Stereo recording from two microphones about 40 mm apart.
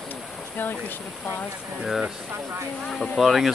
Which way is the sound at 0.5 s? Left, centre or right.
Left.